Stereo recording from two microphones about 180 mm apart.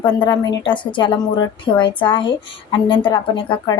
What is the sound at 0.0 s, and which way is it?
A woman's voice, 25° left (ahead or behind).